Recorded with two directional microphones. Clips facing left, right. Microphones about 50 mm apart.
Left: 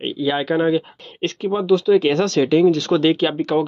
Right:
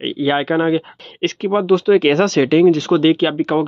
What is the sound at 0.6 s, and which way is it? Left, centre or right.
Speech, right.